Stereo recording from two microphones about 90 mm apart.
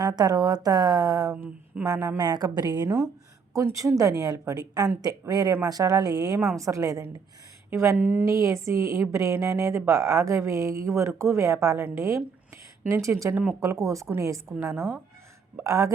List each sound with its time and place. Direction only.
0.0 s a woman's voice: 45° right (ahead or behind)
3.5 s a woman's voice: 35° right (ahead or behind); by 8.3 s 20° right (ahead or behind)
8.3 s a woman's voice: 35° right (ahead or behind)
13.3 s speech: 15° right (ahead or behind)
13.6 s a woman's voice: 35° right (ahead or behind)